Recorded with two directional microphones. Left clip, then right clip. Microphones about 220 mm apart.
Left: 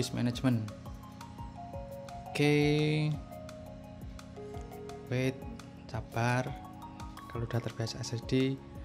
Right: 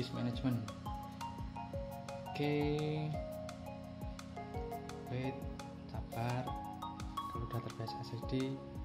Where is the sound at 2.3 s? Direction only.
30° left (ahead or behind).